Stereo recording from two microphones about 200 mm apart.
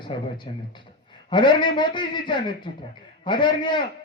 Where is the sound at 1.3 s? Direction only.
25° left (ahead or behind).